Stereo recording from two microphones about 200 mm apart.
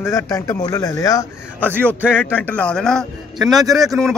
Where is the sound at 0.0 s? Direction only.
15° left (ahead or behind).